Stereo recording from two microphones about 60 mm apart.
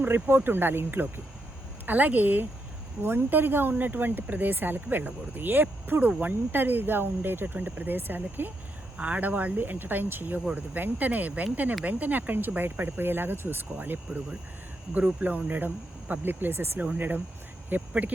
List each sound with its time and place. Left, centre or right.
0.0 s speech: right